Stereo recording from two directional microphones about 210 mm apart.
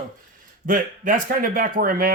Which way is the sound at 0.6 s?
40° right (ahead or behind).